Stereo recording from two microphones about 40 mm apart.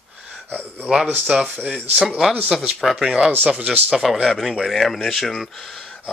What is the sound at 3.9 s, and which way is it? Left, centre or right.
Speech, centre.